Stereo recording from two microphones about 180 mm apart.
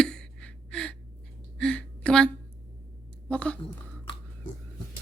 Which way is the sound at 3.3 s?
5° left (ahead or behind).